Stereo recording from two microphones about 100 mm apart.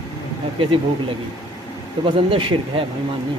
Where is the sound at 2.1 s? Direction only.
60° right (ahead or behind).